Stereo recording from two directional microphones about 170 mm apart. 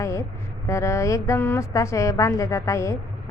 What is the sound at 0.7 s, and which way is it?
A woman's voice, 15° left (ahead or behind).